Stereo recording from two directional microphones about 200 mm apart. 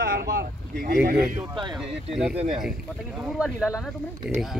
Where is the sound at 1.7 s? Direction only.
Centre (ahead or behind).